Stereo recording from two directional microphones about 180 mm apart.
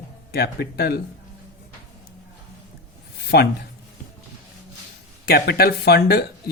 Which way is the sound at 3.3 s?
65° left (ahead or behind).